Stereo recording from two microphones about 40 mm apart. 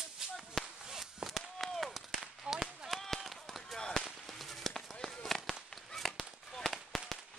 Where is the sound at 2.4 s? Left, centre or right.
Centre.